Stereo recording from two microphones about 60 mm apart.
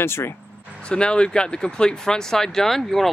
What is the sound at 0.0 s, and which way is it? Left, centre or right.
Speech, left.